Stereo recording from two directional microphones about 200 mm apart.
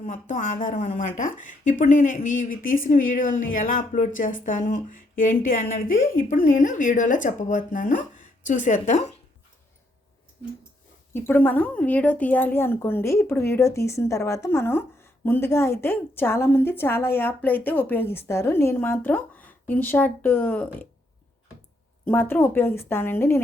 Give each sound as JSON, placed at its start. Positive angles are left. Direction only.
{"t": 0.0, "sound": "a woman's voice", "side_deg": 35}
{"t": 11.1, "sound": "a woman's voice", "side_deg": 10}
{"t": 22.0, "sound": "a woman's voice", "side_deg": 10}